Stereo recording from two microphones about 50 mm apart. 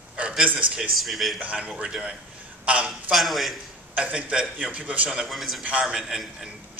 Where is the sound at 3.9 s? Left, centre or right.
Right.